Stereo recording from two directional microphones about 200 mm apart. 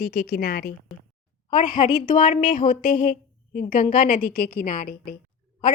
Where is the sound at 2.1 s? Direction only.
40° left (ahead or behind).